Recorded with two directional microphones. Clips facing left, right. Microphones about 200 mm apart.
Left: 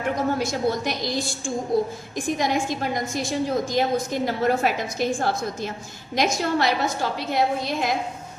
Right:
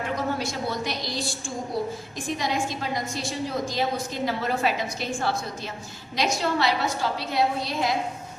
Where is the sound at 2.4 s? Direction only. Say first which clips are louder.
Left 3 dB; 50° left (ahead or behind).